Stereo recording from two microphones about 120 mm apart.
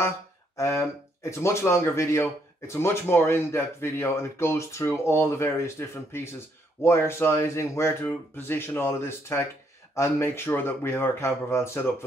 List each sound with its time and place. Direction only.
0.6 s speech: 25° left (ahead or behind)